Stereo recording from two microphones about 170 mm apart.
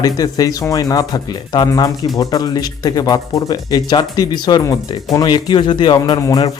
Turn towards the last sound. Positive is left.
turn(degrees=25)  # may be behind; listen again after turning